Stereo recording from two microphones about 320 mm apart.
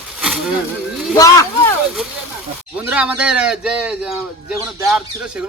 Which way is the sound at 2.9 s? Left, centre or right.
Centre.